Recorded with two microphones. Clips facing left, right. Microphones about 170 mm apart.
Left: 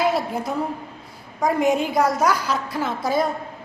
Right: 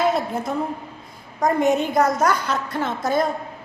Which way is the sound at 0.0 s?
5° left (ahead or behind).